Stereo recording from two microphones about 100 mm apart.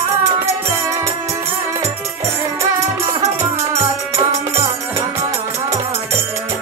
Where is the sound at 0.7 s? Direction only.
30° right (ahead or behind).